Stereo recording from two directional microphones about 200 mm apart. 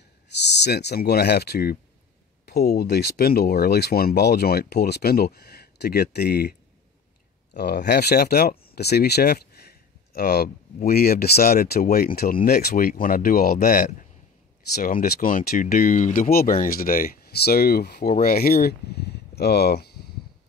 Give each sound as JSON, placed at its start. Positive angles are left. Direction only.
{"t": 0.3, "sound": "speech", "side_deg": 60}
{"t": 7.5, "sound": "speech", "side_deg": 50}